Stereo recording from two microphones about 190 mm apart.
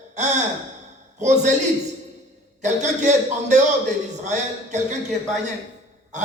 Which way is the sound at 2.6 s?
40° right (ahead or behind).